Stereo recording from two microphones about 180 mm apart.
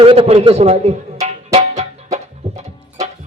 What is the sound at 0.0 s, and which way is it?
Speech, 30° right (ahead or behind).